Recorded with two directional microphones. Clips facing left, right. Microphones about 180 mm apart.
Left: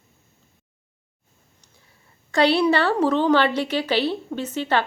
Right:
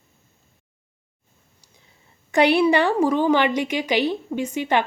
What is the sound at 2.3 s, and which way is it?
A woman's voice, 15° right (ahead or behind).